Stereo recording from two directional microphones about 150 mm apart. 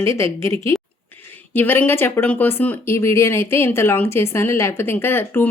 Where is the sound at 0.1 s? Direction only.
20° left (ahead or behind).